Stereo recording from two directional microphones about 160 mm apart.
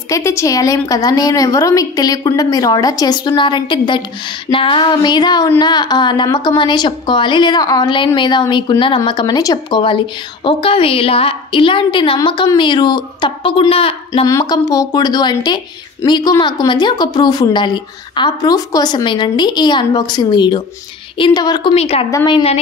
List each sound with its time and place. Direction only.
0.1 s a woman's voice: 15° left (ahead or behind); by 14.2 s 35° left (ahead or behind)
14.2 s a woman's voice: 25° left (ahead or behind)
21.7 s a woman's voice: 40° left (ahead or behind)